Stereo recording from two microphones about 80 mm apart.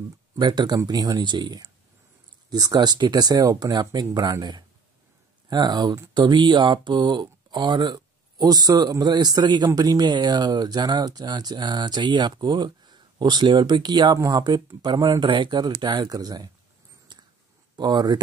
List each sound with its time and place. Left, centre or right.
0.4 s speech: right
6.1 s speech: right
17.1 s a sound: right
17.7 s speech: right